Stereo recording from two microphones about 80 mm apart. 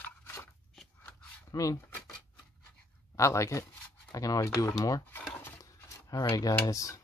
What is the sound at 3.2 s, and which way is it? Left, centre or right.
Speech, left.